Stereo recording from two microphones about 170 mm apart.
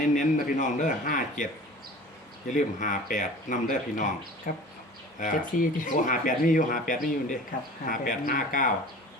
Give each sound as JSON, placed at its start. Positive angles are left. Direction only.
{"t": 0.0, "sound": "speech", "side_deg": 50}
{"t": 2.5, "sound": "speech", "side_deg": 50}